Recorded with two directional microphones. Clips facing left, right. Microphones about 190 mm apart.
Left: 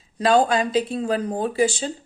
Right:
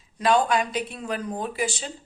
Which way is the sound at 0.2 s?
30° left (ahead or behind).